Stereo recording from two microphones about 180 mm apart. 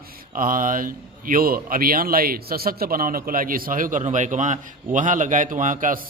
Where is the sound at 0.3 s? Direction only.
50° right (ahead or behind).